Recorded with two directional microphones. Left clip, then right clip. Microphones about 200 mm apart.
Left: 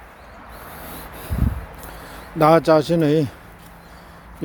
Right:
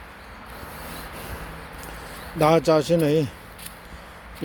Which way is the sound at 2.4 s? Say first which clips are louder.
Left 4 dB; 15° left (ahead or behind).